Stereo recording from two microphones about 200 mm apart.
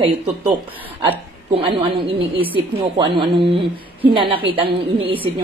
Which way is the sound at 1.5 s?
30° right (ahead or behind).